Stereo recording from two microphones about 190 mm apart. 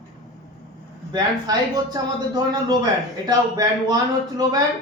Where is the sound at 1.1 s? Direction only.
20° right (ahead or behind).